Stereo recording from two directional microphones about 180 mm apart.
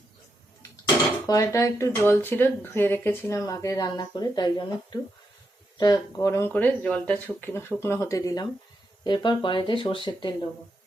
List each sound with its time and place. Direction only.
1.3 s speech: 15° left (ahead or behind)